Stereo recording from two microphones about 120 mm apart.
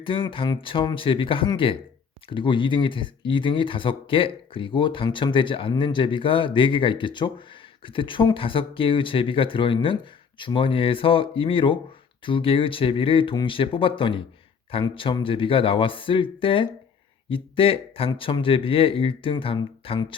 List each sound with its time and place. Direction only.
0.0 s speech: 45° left (ahead or behind)